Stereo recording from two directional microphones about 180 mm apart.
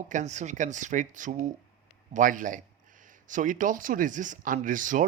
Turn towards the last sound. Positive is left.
turn(degrees=-45)  # may be behind; listen again after turning